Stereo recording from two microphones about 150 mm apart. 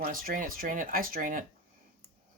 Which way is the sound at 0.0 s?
70° right (ahead or behind).